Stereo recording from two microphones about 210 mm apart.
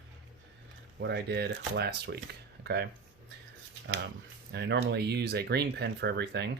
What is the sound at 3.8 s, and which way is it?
Speech, 65° right (ahead or behind).